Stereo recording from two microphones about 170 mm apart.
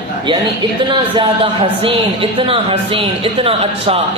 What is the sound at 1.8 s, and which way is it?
A man's voice, 30° right (ahead or behind).